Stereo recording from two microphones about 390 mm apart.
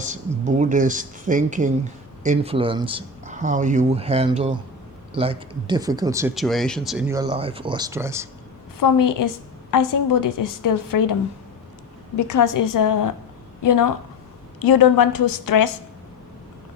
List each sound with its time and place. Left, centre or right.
0.0 s speech: centre
8.8 s a woman's voice: left
12.1 s a woman's voice: left